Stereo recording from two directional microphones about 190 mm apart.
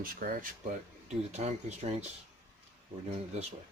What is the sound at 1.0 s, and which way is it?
Speech, 35° right (ahead or behind).